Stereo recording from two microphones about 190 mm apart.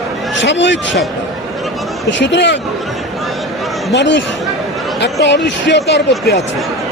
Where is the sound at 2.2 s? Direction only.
70° left (ahead or behind).